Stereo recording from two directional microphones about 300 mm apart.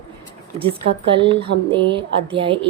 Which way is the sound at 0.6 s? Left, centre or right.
Centre.